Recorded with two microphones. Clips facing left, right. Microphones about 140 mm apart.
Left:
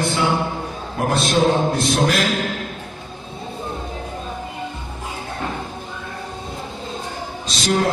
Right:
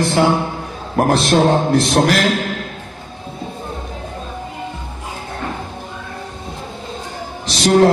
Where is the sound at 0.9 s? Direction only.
70° right (ahead or behind).